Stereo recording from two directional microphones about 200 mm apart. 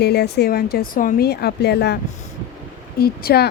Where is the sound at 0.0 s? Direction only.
55° left (ahead or behind).